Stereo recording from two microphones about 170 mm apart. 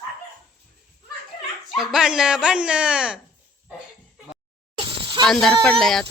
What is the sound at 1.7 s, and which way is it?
Speech, centre (ahead or behind).